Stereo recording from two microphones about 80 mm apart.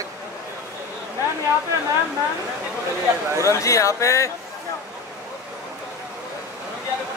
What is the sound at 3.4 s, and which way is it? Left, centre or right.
Speech, left.